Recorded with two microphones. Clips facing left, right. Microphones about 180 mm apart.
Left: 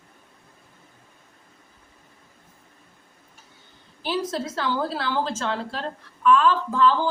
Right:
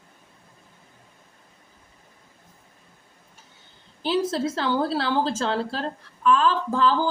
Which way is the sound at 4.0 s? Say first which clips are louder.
Right 3 dB; 30° right (ahead or behind).